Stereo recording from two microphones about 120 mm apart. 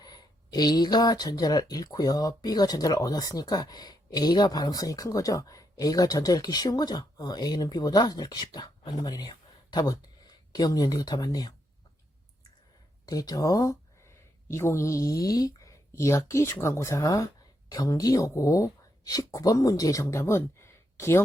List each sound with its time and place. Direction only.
0.0 s speech: 35° left (ahead or behind)
13.1 s speech: 30° left (ahead or behind)